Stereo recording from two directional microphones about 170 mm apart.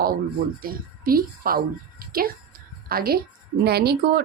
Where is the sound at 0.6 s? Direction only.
60° right (ahead or behind).